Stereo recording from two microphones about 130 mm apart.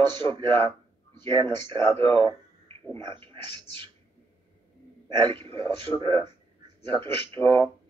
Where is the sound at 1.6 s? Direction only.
45° right (ahead or behind).